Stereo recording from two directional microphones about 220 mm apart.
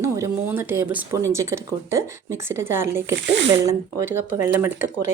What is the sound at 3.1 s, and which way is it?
Speech, 50° right (ahead or behind).